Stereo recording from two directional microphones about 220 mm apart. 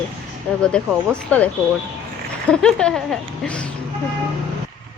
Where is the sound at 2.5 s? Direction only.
5° left (ahead or behind).